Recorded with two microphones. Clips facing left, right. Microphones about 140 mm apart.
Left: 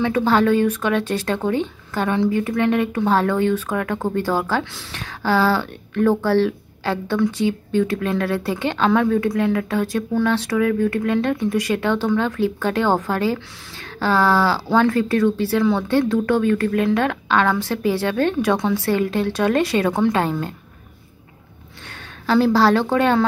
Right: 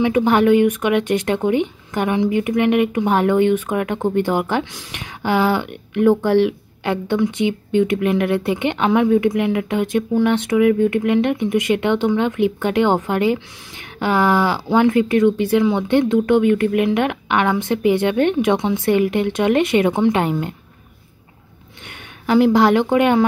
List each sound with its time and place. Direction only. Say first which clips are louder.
0.0 s speech: right 2 dB; 20° right (ahead or behind)
21.8 s a woman's voice: right 1 dB; 20° right (ahead or behind)